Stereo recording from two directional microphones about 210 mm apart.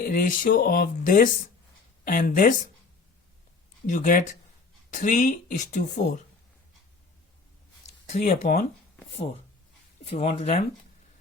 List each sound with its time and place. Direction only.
0.1 s speech: 40° left (ahead or behind)
3.8 s speech: 40° left (ahead or behind)
7.9 s speech: 35° left (ahead or behind)